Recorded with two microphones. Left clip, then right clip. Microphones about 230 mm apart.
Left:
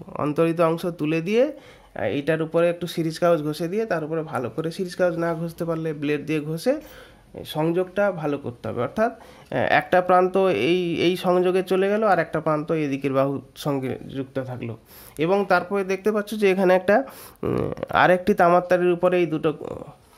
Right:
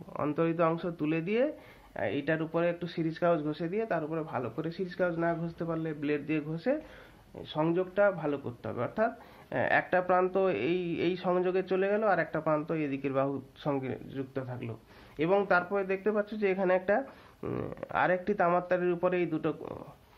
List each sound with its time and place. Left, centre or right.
0.1 s speech: left